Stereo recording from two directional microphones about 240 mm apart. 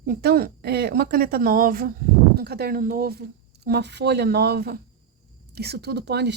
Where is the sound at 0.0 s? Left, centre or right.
Right.